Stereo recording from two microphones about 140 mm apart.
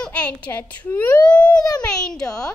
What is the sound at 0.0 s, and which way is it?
A child's voice, 10° left (ahead or behind).